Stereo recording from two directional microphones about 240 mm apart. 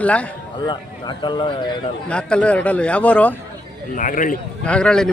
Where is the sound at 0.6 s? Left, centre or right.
Centre.